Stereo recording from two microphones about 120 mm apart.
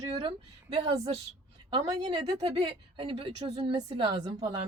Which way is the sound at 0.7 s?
50° right (ahead or behind).